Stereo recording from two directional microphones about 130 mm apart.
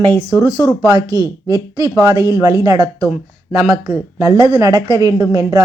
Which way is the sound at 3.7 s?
20° right (ahead or behind).